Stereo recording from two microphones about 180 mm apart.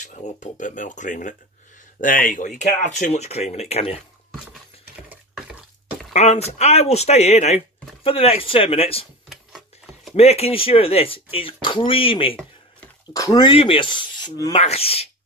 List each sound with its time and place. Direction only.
0.0 s speech: 40° left (ahead or behind)
6.1 s speech: 35° left (ahead or behind)
9.3 s a sound: centre (ahead or behind)
10.1 s speech: 35° left (ahead or behind)
13.1 s filing: 20° left (ahead or behind)
14.5 s speech: 35° left (ahead or behind)